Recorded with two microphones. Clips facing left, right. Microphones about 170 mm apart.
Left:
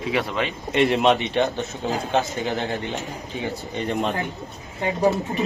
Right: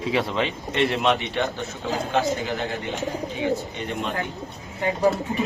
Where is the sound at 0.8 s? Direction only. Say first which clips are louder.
Left 3 dB; 20° left (ahead or behind).